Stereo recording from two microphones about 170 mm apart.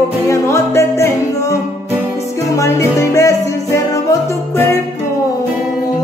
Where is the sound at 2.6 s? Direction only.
15° left (ahead or behind).